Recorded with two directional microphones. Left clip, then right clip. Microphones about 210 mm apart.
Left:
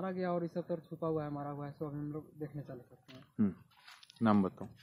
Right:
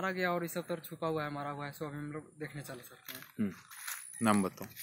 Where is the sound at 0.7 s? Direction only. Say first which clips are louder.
Right 1 dB; 30° right (ahead or behind).